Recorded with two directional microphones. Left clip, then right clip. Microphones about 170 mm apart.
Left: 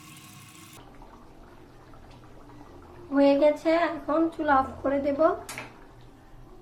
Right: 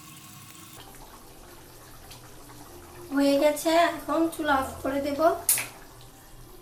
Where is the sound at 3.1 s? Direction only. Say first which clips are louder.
Left 2 dB; 20° left (ahead or behind).